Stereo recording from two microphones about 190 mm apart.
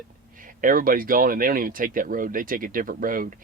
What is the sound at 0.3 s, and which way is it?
Speech, 45° right (ahead or behind).